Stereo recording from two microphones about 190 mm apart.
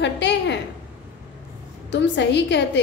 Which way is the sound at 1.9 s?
65° left (ahead or behind).